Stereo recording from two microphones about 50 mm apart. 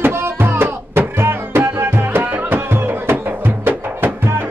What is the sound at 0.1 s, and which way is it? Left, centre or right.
Music, right.